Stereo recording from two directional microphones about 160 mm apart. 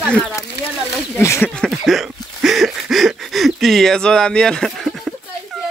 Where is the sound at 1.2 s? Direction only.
15° left (ahead or behind).